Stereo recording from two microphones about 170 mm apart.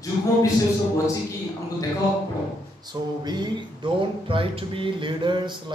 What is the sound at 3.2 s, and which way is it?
Speech, 25° right (ahead or behind).